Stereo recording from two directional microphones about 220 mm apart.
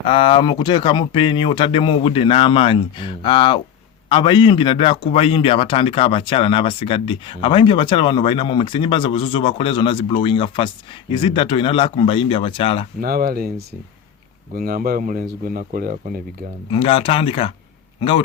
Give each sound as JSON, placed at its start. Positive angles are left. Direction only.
{"t": 0.1, "sound": "a man's voice", "side_deg": 25}
{"t": 13.0, "sound": "speech", "side_deg": -45}
{"t": 14.5, "sound": "speech", "side_deg": -45}
{"t": 16.6, "sound": "a man's voice", "side_deg": 25}